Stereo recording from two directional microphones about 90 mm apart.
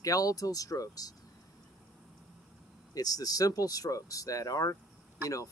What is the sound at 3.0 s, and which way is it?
Speech, 45° left (ahead or behind).